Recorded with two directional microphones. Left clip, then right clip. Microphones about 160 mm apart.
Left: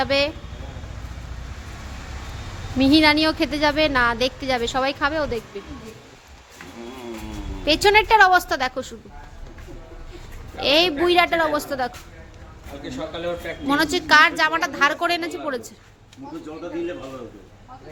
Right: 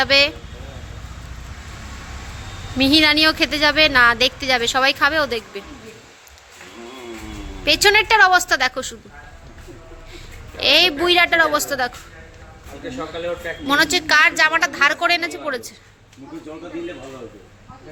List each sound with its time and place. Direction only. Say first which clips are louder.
0.0 s a woman's voice: right 5 dB; 15° left (ahead or behind)
2.7 s a woman's voice: right 2 dB; 15° left (ahead or behind)
7.6 s a woman's voice: right 2 dB; 15° left (ahead or behind)
10.6 s a woman's voice: right 3 dB; 15° left (ahead or behind)
13.7 s a woman's voice: right 2 dB; 15° left (ahead or behind)